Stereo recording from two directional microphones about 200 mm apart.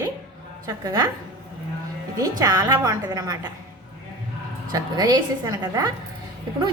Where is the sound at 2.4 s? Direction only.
20° right (ahead or behind).